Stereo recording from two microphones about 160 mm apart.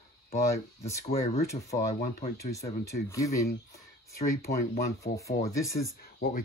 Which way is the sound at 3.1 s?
20° left (ahead or behind).